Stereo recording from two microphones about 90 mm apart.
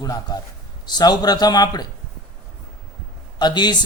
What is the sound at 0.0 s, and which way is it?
A man's voice, 45° left (ahead or behind).